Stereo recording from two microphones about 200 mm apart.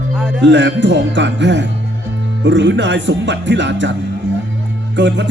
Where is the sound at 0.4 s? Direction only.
60° right (ahead or behind).